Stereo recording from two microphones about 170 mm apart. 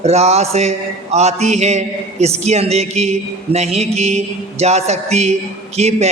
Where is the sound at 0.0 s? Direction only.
40° right (ahead or behind).